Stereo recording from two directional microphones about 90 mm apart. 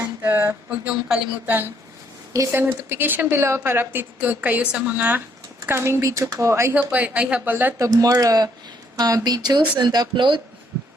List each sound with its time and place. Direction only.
0.2 s a sound: 20° right (ahead or behind)
0.9 s a woman's voice: 10° right (ahead or behind)
1.5 s a woman's voice: 25° right (ahead or behind)
6.7 s a woman's voice: 15° right (ahead or behind)
7.8 s speech: 40° right (ahead or behind); by 10.4 s 60° right (ahead or behind)